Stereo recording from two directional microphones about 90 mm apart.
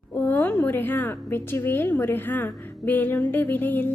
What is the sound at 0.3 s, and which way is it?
Speech, 20° left (ahead or behind).